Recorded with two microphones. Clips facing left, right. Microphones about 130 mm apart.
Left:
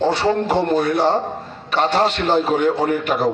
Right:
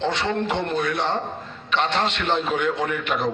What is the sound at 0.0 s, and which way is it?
A man's voice, 35° left (ahead or behind).